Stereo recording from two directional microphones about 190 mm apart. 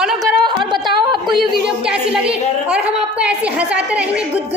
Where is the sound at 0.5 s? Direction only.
25° right (ahead or behind).